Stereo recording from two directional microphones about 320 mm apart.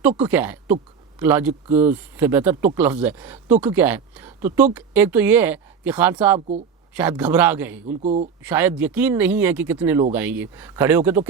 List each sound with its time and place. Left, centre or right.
0.2 s speech: centre
7.9 s speech: right
8.4 s speech: centre